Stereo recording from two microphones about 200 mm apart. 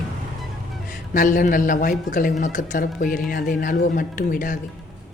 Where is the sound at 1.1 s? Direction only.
40° left (ahead or behind).